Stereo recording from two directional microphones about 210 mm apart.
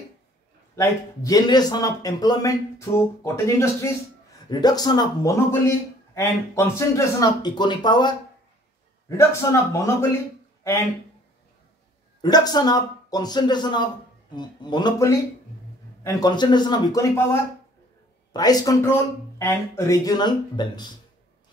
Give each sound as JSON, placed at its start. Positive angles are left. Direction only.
{"t": 0.7, "sound": "a man's voice", "side_deg": 15}
{"t": 9.1, "sound": "a man's voice", "side_deg": 15}
{"t": 12.2, "sound": "a man's voice", "side_deg": 20}